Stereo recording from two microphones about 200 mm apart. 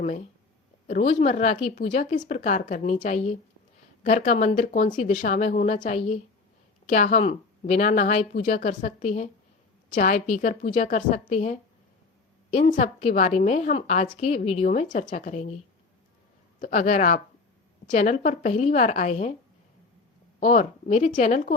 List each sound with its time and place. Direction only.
1.0 s a woman's voice: 35° left (ahead or behind)
12.5 s a woman's voice: 35° left (ahead or behind)
16.6 s a woman's voice: 40° left (ahead or behind)
20.4 s a woman's voice: 35° left (ahead or behind)